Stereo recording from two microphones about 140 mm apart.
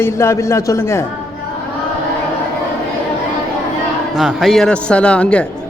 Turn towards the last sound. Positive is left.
turn(degrees=10)  # may be behind; listen again after turning